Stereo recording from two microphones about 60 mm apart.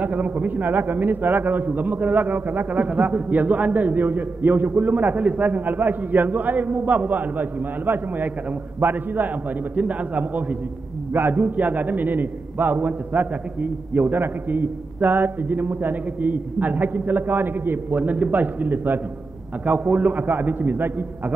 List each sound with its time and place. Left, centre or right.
0.0 s a man's voice: right